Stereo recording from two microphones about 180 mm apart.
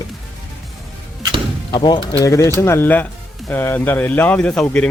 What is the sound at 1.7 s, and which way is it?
Speech, 25° left (ahead or behind).